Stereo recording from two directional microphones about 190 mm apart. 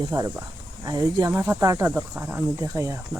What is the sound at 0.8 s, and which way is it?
Speech, 20° right (ahead or behind).